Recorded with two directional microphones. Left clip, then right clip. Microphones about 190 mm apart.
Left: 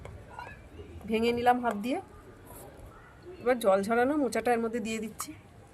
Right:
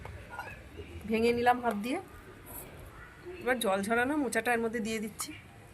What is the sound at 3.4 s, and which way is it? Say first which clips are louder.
Speech: left 4 dB; 55° left (ahead or behind).